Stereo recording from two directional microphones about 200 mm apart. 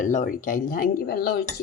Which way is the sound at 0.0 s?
40° left (ahead or behind).